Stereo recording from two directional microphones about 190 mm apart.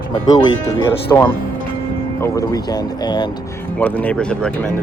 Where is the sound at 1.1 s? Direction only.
15° left (ahead or behind).